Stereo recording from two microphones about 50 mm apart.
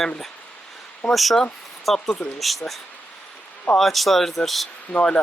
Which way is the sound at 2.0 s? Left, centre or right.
Left.